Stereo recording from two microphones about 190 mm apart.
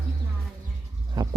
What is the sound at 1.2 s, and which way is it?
Speech, 20° right (ahead or behind).